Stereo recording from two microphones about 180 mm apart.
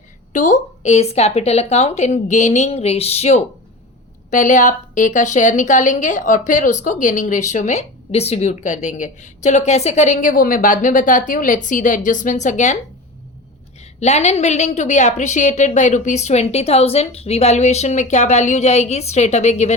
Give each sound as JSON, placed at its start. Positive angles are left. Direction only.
{"t": 0.3, "sound": "a woman's voice", "side_deg": 45}
{"t": 14.0, "sound": "a woman's voice", "side_deg": 40}